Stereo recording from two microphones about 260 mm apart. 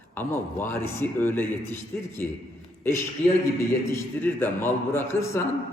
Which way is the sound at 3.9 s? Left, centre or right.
Centre.